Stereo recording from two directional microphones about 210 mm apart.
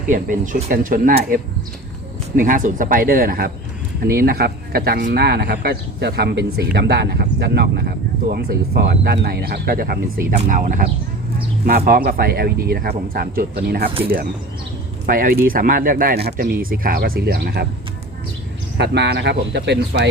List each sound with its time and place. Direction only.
0.1 s speech: 40° right (ahead or behind)
15.0 s speech: 40° right (ahead or behind)
18.8 s speech: 55° right (ahead or behind)